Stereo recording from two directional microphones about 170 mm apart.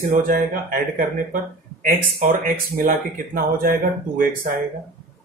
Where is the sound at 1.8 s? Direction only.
60° right (ahead or behind).